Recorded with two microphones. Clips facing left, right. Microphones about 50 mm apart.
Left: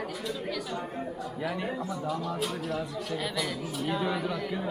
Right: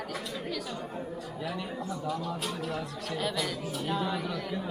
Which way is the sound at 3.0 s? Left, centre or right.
Centre.